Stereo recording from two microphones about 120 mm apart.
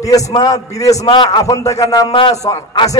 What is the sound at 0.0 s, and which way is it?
Speech, 30° left (ahead or behind).